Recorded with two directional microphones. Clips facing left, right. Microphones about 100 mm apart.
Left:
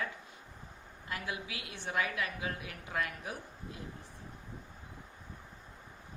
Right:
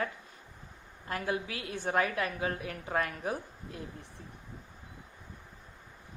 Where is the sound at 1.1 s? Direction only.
40° right (ahead or behind).